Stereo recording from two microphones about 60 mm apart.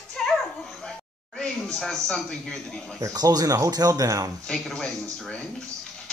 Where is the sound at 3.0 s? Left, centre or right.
Right.